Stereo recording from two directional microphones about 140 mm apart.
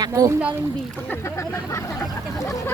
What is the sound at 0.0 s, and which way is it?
Speech, 25° right (ahead or behind).